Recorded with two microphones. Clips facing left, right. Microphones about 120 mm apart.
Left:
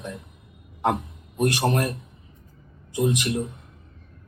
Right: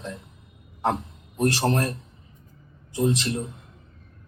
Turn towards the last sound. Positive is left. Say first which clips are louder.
# left 1 dB
turn(degrees=15)  # may be behind; listen again after turning